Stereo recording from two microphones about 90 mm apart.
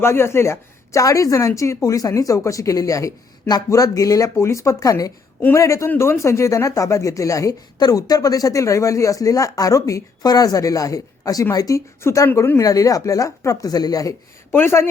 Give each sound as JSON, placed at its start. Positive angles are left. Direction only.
{"t": 0.0, "sound": "speech", "side_deg": 30}
{"t": 12.0, "sound": "speech", "side_deg": 30}
{"t": 14.5, "sound": "speech", "side_deg": 25}